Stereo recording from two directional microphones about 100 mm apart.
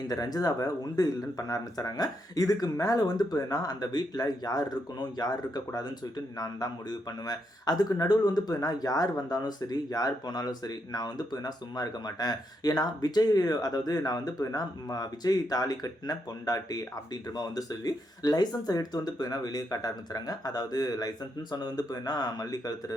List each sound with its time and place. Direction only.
0.1 s speech: 40° left (ahead or behind)